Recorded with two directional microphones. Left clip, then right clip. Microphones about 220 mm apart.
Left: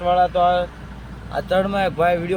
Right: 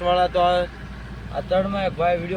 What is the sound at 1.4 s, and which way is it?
Speech, 25° left (ahead or behind).